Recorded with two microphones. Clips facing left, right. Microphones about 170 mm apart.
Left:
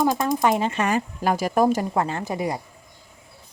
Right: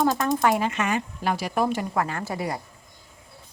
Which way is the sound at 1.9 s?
25° left (ahead or behind).